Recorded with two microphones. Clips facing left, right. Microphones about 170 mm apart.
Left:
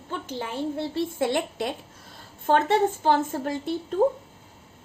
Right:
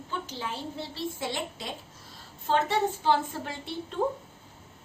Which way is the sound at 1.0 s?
55° left (ahead or behind).